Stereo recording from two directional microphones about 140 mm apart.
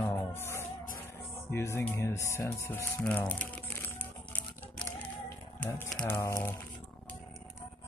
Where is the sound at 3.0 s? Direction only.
10° left (ahead or behind).